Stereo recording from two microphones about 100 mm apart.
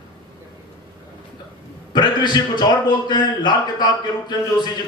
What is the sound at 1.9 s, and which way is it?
A man's voice, 45° left (ahead or behind).